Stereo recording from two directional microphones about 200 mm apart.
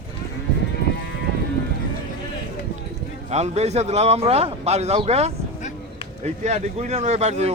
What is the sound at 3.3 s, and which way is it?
A man's voice, 35° right (ahead or behind).